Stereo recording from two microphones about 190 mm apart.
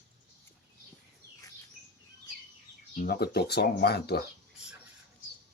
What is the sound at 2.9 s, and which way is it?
Speech, 50° left (ahead or behind).